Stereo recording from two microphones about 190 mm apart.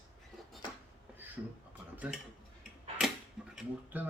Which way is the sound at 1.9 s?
5° right (ahead or behind).